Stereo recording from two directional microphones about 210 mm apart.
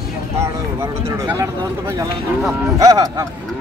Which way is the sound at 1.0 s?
15° right (ahead or behind).